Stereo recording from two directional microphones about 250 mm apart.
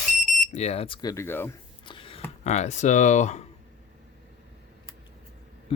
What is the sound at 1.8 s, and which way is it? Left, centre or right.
Speech, centre.